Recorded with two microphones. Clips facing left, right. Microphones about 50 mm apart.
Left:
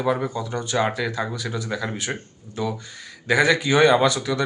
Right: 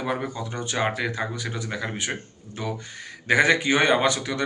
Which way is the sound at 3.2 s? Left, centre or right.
Right.